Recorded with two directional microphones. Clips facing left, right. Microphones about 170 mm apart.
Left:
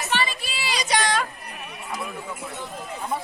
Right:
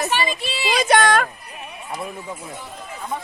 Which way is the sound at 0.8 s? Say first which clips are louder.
Right 7 dB; 55° right (ahead or behind).